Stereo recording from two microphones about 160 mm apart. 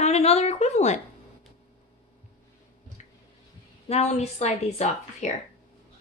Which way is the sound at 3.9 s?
45° left (ahead or behind).